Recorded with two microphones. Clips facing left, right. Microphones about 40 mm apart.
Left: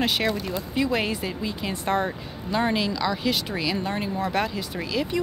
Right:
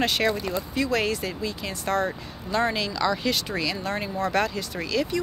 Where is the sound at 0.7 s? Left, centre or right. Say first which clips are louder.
Left 1 dB; centre.